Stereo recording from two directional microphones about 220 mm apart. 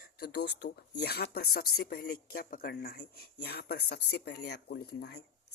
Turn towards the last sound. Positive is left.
turn(degrees=45)  # may be behind; listen again after turning